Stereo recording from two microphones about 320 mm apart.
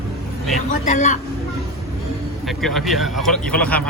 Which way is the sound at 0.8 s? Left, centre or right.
Left.